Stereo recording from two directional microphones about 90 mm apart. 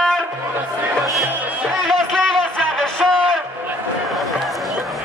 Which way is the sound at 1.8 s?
5° left (ahead or behind).